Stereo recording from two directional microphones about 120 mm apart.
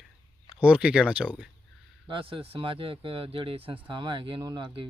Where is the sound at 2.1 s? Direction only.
45° right (ahead or behind).